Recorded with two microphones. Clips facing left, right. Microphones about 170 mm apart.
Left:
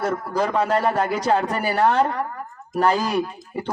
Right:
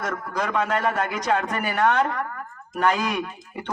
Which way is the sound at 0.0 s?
30° left (ahead or behind).